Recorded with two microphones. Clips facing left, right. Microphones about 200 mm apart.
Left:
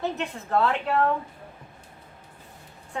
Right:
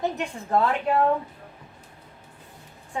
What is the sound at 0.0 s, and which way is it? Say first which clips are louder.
A woman's voice: right 1 dB; 15° right (ahead or behind).